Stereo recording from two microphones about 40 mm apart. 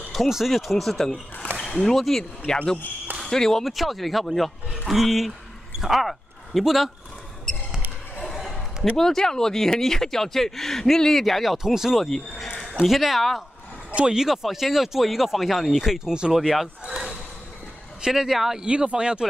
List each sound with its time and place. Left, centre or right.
0.3 s speech: centre
1.6 s a sound: left
2.0 s speech: centre
2.4 s speech: left
3.6 s speech: centre
8.9 s speech: centre
11.5 s speech: centre
12.0 s speech: centre
14.0 s speech: centre
16.1 s speech: centre
16.3 s speech: centre
16.8 s basketball bounce: centre
18.0 s speech: centre
18.6 s speech: right